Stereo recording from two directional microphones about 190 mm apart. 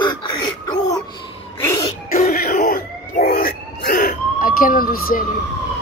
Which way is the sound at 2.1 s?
50° left (ahead or behind).